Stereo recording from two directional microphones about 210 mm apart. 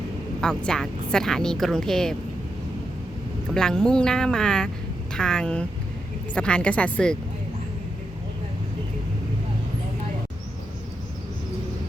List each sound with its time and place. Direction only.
0.4 s speech: 5° left (ahead or behind)
3.5 s speech: 5° left (ahead or behind)